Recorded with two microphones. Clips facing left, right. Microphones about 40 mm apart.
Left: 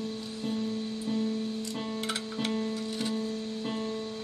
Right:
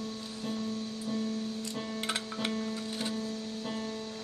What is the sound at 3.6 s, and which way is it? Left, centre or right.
Music, left.